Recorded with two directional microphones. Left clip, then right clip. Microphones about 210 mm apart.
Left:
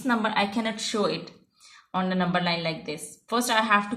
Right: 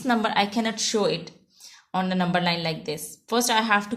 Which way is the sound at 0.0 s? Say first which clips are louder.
Right 2 dB; 45° right (ahead or behind).